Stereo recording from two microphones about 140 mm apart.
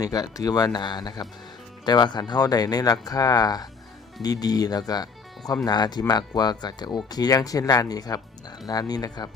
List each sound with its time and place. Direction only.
0.0 s speech: 25° left (ahead or behind)